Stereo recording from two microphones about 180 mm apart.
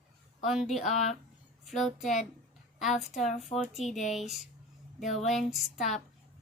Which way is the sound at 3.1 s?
40° left (ahead or behind).